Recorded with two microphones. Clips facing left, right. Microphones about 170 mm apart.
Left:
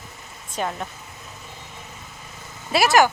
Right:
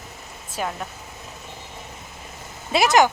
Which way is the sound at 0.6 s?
5° right (ahead or behind).